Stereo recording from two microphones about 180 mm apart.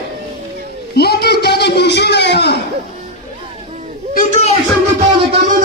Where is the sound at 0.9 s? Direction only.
60° left (ahead or behind).